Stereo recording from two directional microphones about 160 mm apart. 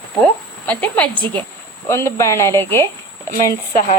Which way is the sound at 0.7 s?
10° left (ahead or behind).